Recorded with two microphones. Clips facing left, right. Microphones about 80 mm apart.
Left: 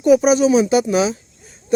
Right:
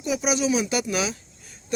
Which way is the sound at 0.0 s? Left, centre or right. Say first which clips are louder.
Left 12 dB; left.